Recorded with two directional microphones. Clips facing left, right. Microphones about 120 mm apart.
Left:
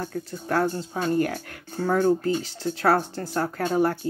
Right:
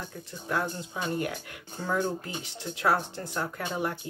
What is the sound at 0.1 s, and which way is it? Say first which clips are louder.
Speech: left 6 dB; 50° left (ahead or behind).